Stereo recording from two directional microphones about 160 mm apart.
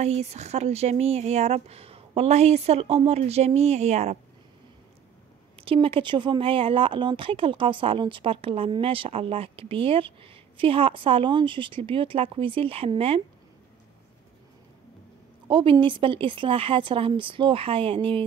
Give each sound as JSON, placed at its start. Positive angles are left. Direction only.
{"t": 0.0, "sound": "speech", "side_deg": -45}
{"t": 5.6, "sound": "speech", "side_deg": -35}
{"t": 15.4, "sound": "speech", "side_deg": -30}